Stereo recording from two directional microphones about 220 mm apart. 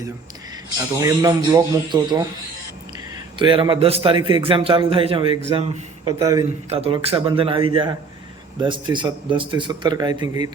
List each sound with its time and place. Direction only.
0.9 s speech: 15° right (ahead or behind)
3.3 s a man's voice: 20° right (ahead or behind)